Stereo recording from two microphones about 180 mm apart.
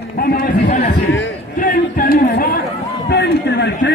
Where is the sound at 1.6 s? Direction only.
50° left (ahead or behind).